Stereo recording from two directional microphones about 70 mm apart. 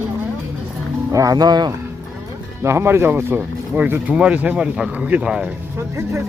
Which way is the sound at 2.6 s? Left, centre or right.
Right.